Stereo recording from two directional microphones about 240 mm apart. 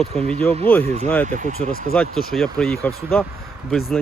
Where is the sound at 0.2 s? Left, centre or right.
Right.